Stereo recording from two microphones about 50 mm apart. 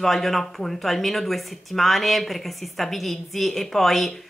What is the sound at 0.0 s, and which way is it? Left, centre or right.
Speech, centre.